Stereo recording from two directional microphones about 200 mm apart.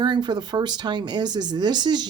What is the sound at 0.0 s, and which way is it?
Speech, 20° right (ahead or behind).